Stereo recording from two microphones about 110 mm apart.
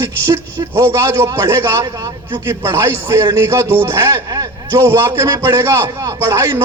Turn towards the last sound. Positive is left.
turn(degrees=-25)  # may be behind; listen again after turning